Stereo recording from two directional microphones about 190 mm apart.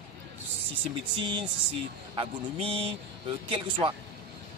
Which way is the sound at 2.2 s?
30° right (ahead or behind).